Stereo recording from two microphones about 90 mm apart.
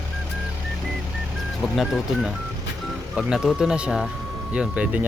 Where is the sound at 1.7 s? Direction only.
Centre (ahead or behind).